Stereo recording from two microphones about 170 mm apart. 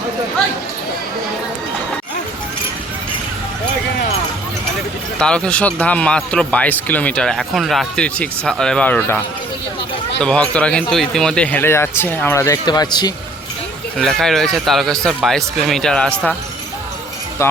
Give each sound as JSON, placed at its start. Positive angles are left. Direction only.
{"t": 5.2, "sound": "speech", "side_deg": 5}
{"t": 10.2, "sound": "speech", "side_deg": 5}
{"t": 14.0, "sound": "speech", "side_deg": 0}
{"t": 17.4, "sound": "speech", "side_deg": 15}